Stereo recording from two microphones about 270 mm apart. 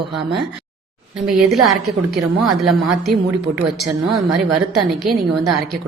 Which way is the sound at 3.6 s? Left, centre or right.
Centre.